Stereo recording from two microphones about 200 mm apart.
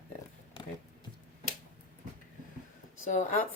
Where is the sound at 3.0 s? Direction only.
40° left (ahead or behind).